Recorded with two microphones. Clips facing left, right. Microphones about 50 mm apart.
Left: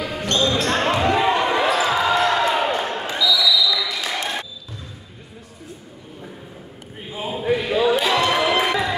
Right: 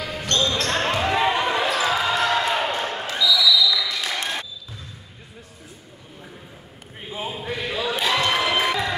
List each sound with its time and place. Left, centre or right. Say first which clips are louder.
0.0 s basketball bounce: left 3 dB; centre
7.2 s a sound: left 7 dB; centre
8.0 s crowd: left 3 dB; centre